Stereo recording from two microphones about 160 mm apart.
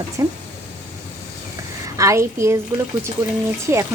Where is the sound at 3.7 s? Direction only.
15° right (ahead or behind).